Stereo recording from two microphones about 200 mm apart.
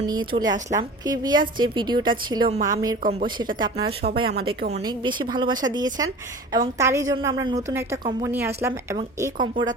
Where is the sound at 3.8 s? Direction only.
25° right (ahead or behind).